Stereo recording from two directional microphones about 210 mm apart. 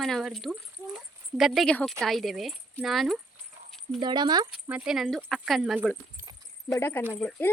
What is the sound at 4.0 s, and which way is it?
Speech, 20° right (ahead or behind).